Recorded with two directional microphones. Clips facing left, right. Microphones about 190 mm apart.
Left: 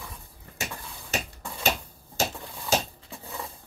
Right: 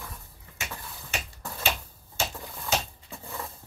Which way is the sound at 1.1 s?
40° left (ahead or behind).